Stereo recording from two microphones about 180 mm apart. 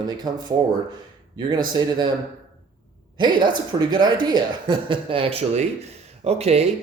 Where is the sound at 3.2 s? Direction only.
25° right (ahead or behind).